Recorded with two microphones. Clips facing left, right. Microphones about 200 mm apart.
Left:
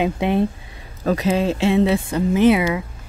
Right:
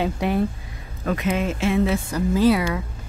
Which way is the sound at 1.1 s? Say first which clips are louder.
Left 4 dB; 30° left (ahead or behind).